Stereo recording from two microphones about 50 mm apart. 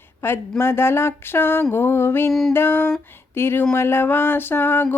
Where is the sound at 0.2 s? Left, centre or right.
Left.